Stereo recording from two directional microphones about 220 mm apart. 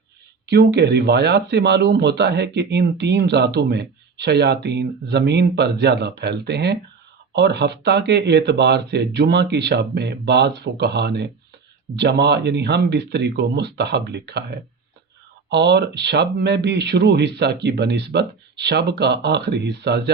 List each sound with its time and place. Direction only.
0.4 s speech: 50° right (ahead or behind)